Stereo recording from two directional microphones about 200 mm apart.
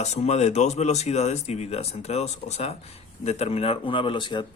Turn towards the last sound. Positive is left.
turn(degrees=25)  # may be behind; listen again after turning